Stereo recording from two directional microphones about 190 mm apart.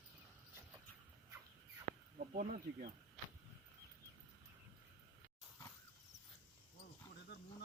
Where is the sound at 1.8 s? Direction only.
45° right (ahead or behind).